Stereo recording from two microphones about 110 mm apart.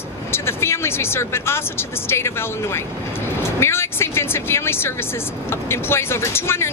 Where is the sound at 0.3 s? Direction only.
25° left (ahead or behind).